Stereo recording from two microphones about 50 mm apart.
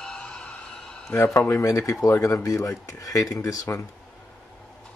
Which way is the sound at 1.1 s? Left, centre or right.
Left.